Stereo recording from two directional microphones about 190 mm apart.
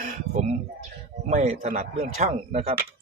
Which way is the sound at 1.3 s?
40° right (ahead or behind).